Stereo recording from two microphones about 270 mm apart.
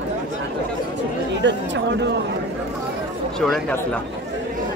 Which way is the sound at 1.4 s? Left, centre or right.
Right.